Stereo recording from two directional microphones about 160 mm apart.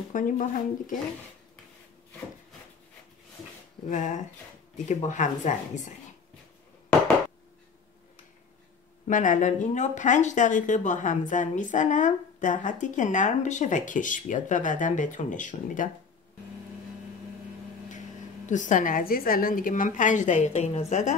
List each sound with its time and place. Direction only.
0.1 s speech: 55° left (ahead or behind)
3.9 s speech: 50° left (ahead or behind)
9.0 s speech: 55° left (ahead or behind)
18.5 s speech: 50° left (ahead or behind)